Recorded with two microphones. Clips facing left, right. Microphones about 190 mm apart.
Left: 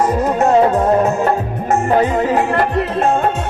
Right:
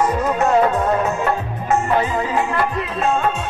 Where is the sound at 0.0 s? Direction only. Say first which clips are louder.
Left 3 dB; 40° left (ahead or behind).